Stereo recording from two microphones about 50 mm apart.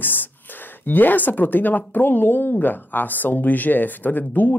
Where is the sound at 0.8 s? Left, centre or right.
Left.